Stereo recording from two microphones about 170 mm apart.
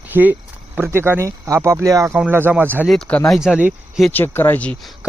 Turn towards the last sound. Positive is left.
turn(degrees=5)  # may be behind; listen again after turning